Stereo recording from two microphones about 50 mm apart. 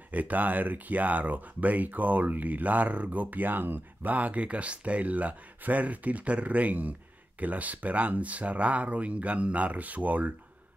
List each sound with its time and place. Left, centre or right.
0.1 s speech: right